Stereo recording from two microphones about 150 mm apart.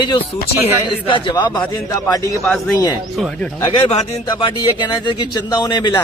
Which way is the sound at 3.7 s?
40° left (ahead or behind).